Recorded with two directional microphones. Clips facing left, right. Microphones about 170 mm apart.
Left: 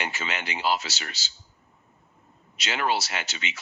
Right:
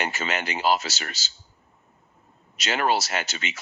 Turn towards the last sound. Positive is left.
turn(degrees=-45)  # may be behind; listen again after turning